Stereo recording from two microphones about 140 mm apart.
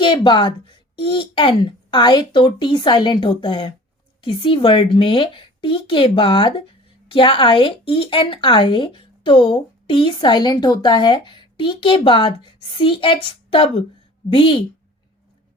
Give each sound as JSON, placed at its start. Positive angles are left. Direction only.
{"t": 0.0, "sound": "a woman's voice", "side_deg": 35}